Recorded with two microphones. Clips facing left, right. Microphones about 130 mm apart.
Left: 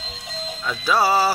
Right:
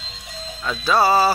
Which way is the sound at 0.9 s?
10° left (ahead or behind).